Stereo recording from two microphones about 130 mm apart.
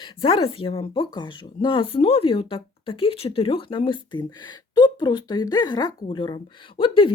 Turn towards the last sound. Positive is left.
turn(degrees=40)  # may be behind; listen again after turning